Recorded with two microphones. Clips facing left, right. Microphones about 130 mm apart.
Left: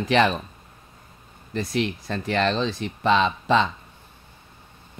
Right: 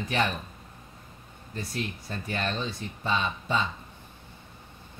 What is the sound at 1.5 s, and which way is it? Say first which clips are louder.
Speech: left 9 dB; 90° left.